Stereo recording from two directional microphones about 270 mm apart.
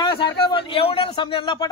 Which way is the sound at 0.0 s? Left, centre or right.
Centre.